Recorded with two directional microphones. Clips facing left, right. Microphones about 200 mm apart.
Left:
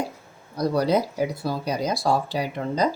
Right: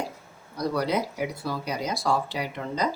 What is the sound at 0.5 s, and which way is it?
Speech, 35° left (ahead or behind).